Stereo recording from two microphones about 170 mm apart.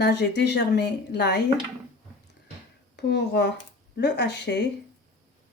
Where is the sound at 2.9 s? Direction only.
85° left.